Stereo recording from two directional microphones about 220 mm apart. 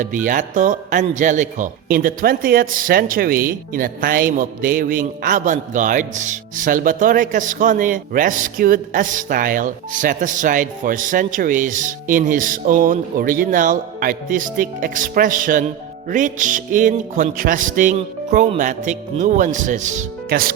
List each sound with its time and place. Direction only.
0.0 s a man's voice: 35° right (ahead or behind)